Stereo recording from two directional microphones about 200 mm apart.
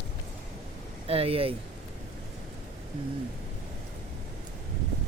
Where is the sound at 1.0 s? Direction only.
30° right (ahead or behind).